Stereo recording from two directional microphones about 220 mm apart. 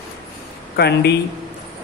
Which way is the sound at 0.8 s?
45° left (ahead or behind).